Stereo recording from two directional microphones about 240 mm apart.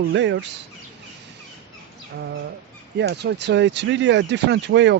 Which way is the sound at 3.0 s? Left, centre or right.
Right.